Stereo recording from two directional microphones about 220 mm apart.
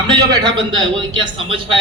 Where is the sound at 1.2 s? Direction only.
25° right (ahead or behind).